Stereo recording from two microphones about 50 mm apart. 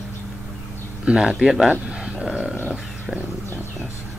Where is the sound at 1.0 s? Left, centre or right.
Centre.